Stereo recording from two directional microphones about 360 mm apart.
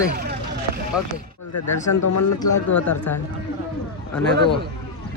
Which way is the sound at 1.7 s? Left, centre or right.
Left.